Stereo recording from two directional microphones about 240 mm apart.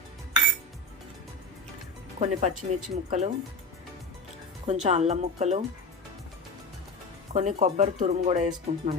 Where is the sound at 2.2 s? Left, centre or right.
Right.